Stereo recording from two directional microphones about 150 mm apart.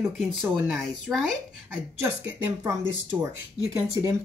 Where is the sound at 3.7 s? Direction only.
20° right (ahead or behind).